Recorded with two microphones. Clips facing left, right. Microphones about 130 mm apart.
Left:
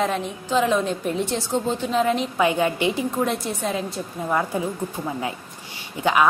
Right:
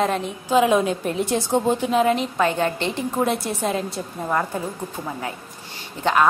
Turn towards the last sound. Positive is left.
turn(degrees=10)  # may be behind; listen again after turning